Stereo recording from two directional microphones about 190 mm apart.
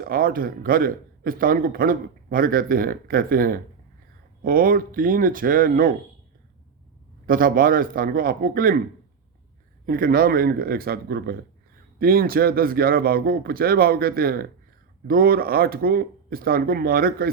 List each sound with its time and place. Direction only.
0.0 s a man's voice: 50° right (ahead or behind)
7.3 s a man's voice: 50° right (ahead or behind)
9.8 s a man's voice: 50° right (ahead or behind)